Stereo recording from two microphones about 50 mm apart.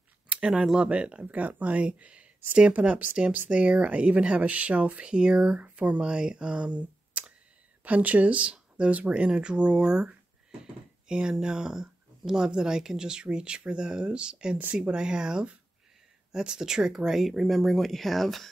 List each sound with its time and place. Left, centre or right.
0.3 s speech: centre
1.3 s speech: right; by 18.5 s centre